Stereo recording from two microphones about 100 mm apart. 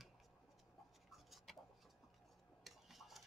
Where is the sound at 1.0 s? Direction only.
Centre (ahead or behind).